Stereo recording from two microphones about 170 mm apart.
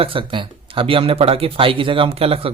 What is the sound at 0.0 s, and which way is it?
Speech, 30° right (ahead or behind).